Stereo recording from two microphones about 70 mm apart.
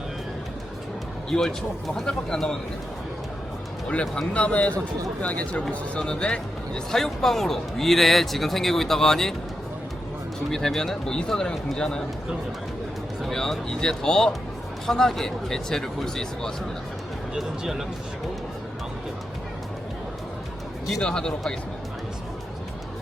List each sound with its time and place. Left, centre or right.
1.3 s speech: centre
3.8 s speech: centre
10.5 s speech: centre
13.2 s speech: centre
17.3 s speech: centre
21.0 s speech: centre